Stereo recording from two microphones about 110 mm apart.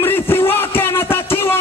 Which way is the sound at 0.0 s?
20° left (ahead or behind).